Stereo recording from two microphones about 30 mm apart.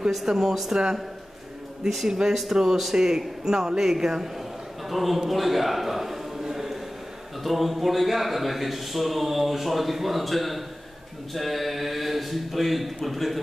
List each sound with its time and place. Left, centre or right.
0.1 s a man's voice: centre
2.0 s a man's voice: centre
4.8 s a man's voice: centre
5.3 s a sound: centre
7.4 s a man's voice: centre